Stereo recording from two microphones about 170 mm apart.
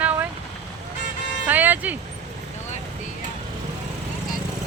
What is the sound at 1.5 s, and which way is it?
Speech, 10° right (ahead or behind).